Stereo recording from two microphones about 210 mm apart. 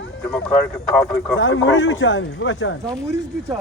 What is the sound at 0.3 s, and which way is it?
Speech, 5° left (ahead or behind).